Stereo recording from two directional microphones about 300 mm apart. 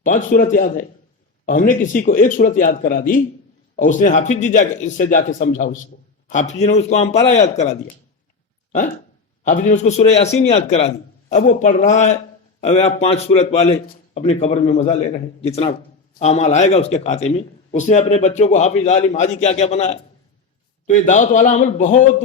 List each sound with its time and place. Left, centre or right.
0.0 s a man's voice: left
9.4 s a man's voice: left